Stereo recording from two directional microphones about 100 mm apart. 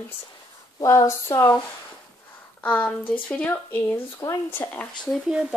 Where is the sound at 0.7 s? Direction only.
35° left (ahead or behind).